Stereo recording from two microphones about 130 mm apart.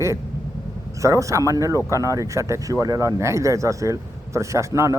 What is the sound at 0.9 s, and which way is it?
Speech, 25° right (ahead or behind).